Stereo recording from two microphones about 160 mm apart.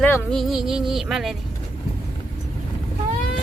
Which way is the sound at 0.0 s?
5° left (ahead or behind).